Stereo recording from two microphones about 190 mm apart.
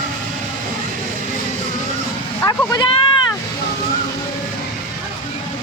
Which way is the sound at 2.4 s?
20° left (ahead or behind).